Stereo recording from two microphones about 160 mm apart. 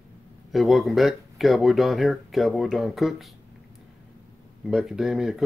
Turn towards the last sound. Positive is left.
turn(degrees=0)  # may be behind; listen again after turning